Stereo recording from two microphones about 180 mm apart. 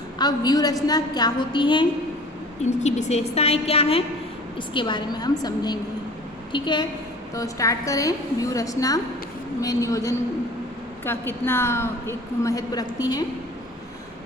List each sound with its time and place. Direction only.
0.2 s a woman's voice: 20° left (ahead or behind)
2.6 s a woman's voice: 40° left (ahead or behind); by 12.9 s 20° left (ahead or behind)